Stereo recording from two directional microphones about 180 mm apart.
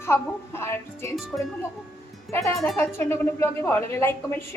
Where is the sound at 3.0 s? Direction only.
10° left (ahead or behind).